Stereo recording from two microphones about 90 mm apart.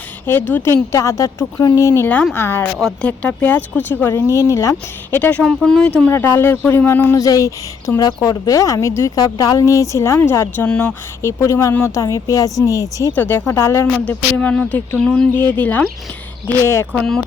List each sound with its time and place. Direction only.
0.3 s speech: 20° left (ahead or behind); by 2.0 s 35° left (ahead or behind)
2.3 s speech: 25° left (ahead or behind)
2.8 s speech: 15° left (ahead or behind); by 5.2 s 35° left (ahead or behind)
5.4 s speech: 5° left (ahead or behind)
6.1 s speech: 25° left (ahead or behind)
7.2 s speech: 40° left (ahead or behind); by 10.9 s 15° left (ahead or behind)
11.2 s speech: 30° left (ahead or behind)
13.1 s speech: 25° left (ahead or behind)
14.1 s speech: 15° left (ahead or behind)
16.5 s speech: 30° left (ahead or behind)
16.9 s speech: 10° left (ahead or behind)